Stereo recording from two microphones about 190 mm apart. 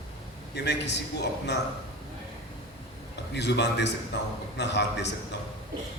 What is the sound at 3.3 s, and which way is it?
A man's voice, 65° left (ahead or behind).